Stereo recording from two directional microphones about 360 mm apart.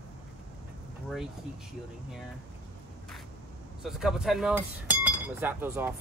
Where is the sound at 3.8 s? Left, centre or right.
Centre.